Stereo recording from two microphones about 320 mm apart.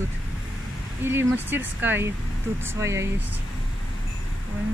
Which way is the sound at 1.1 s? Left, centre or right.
Centre.